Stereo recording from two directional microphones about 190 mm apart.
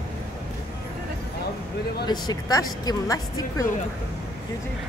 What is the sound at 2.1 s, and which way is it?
Speech, 20° left (ahead or behind).